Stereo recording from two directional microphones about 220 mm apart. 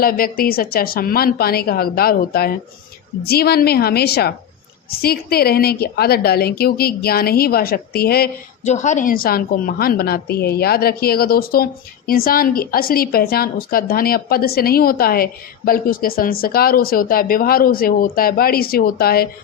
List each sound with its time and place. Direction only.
0.0 s a woman's voice: 40° left (ahead or behind)
8.6 s a woman's voice: 30° left (ahead or behind)